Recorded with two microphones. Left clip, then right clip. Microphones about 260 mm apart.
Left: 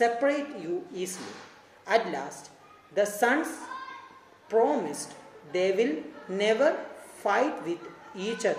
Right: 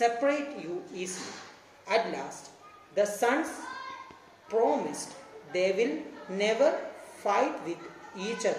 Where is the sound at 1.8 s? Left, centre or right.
Left.